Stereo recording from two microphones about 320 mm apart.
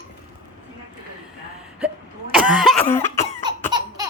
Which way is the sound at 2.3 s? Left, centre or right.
Centre.